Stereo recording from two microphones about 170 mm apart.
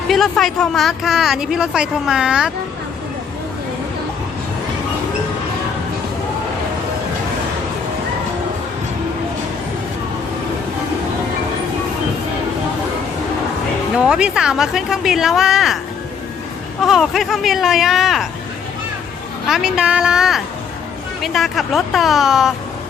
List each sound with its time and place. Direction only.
0.1 s speech: centre (ahead or behind)
13.9 s speech: 5° right (ahead or behind)
16.8 s speech: centre (ahead or behind)
19.5 s speech: 5° right (ahead or behind)